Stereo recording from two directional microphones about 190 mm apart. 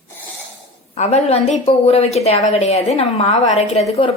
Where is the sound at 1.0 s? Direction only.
35° left (ahead or behind).